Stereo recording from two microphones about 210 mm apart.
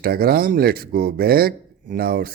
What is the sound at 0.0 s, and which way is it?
Speech, 45° right (ahead or behind).